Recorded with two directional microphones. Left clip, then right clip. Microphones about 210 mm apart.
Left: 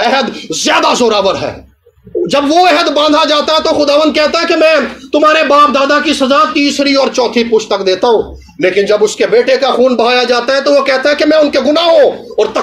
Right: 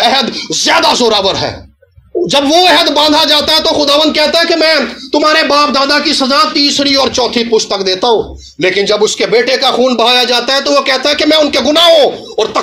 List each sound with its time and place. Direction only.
0.0 s speech: 25° right (ahead or behind)